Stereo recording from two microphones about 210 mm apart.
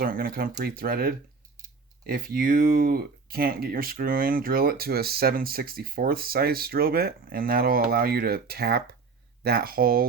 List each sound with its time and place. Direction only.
0.0 s speech: 45° right (ahead or behind)